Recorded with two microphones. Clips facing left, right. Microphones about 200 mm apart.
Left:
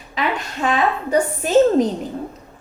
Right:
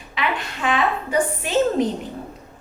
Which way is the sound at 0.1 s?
40° left (ahead or behind).